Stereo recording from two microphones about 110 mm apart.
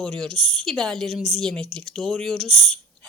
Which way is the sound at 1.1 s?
70° right (ahead or behind).